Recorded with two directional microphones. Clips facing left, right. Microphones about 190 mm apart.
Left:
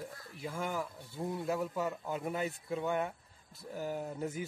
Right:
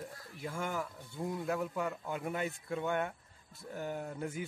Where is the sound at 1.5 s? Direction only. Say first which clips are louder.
Left 1 dB; 20° left (ahead or behind).